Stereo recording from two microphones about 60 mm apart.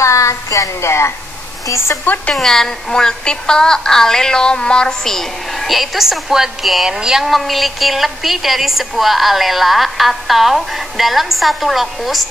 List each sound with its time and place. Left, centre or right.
0.0 s a sound: left
0.8 s speech: left
2.3 s a woman's voice: centre